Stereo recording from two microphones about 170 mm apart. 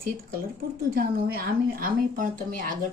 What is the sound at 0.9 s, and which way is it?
Speech, 60° right (ahead or behind).